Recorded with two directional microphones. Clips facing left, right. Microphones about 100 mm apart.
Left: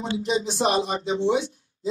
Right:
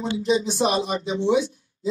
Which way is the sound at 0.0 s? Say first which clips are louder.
Right 3 dB; 30° left (ahead or behind).